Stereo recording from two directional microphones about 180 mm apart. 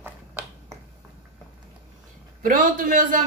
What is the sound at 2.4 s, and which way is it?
Speech, 45° right (ahead or behind).